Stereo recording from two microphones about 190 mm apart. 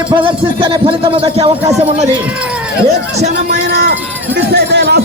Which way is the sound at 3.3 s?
60° right (ahead or behind).